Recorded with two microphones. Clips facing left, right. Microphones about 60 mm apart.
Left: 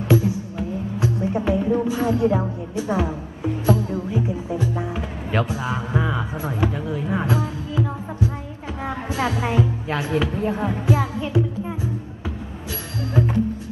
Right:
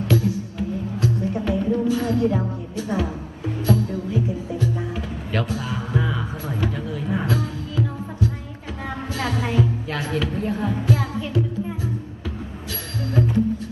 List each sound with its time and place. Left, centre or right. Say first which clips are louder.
0.1 s music: left 3 dB; left
13.2 s music: left 1 dB; centre